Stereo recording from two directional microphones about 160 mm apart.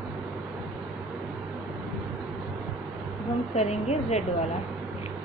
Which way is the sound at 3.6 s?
45° left (ahead or behind).